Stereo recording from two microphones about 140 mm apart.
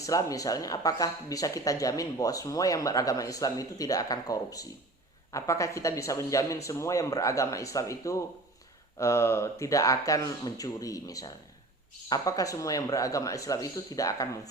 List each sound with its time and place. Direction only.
0.0 s speech: 25° left (ahead or behind)